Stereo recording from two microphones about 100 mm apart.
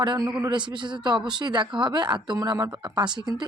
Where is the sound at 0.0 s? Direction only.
50° right (ahead or behind).